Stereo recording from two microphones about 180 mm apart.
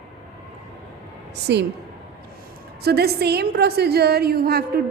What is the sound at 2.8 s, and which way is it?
A woman's voice, 60° right (ahead or behind).